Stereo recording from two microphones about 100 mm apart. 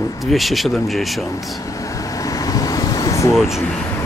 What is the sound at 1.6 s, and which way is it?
Vehicle, 35° left (ahead or behind).